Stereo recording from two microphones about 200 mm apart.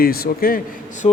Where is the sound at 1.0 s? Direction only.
30° left (ahead or behind).